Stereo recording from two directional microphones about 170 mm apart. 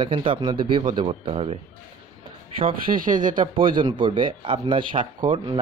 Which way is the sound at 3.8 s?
30° right (ahead or behind).